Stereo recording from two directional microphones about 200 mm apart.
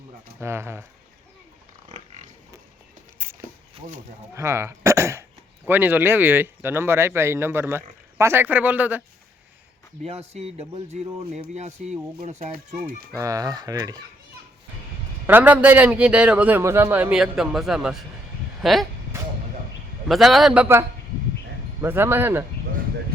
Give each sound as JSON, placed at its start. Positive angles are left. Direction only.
{"t": 0.3, "sound": "speech", "side_deg": -10}
{"t": 1.9, "sound": "pig", "side_deg": -35}
{"t": 3.2, "sound": "a sound", "side_deg": -10}
{"t": 4.4, "sound": "speech", "side_deg": -15}
{"t": 10.0, "sound": "speech", "side_deg": -30}
{"t": 13.1, "sound": "fowl", "side_deg": -15}
{"t": 15.3, "sound": "a man's voice", "side_deg": -10}
{"t": 20.1, "sound": "a man's voice", "side_deg": 0}